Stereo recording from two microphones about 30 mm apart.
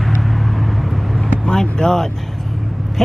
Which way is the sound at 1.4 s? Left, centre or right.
Left.